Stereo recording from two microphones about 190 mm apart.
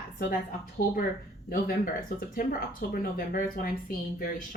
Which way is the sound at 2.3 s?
50° left (ahead or behind).